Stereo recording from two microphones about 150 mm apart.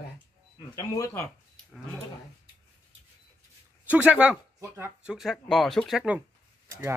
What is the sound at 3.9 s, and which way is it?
Speech, 10° right (ahead or behind).